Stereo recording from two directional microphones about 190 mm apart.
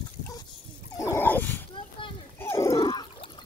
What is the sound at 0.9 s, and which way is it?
Dog, 15° left (ahead or behind).